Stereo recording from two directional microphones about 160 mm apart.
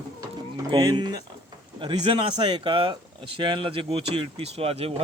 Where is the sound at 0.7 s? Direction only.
25° right (ahead or behind).